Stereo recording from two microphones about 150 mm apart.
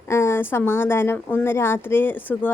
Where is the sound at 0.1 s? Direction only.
15° left (ahead or behind).